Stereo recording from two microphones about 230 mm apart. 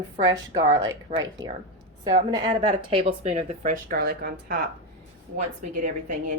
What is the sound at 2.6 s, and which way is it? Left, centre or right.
Speech, right.